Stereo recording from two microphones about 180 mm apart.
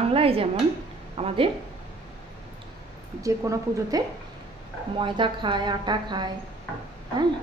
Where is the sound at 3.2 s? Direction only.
15° right (ahead or behind).